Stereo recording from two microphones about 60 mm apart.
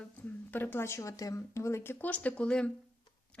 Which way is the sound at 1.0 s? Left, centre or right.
Left.